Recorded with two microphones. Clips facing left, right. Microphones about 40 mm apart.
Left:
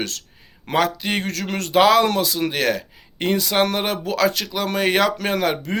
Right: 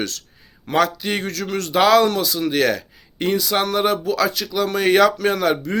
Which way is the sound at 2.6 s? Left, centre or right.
Left.